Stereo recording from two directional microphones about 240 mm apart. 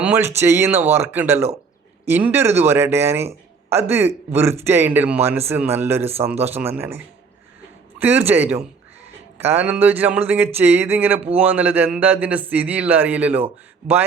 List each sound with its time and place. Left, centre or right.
0.0 s a man's voice: centre
6.0 s speech: right
6.4 s a man's voice: centre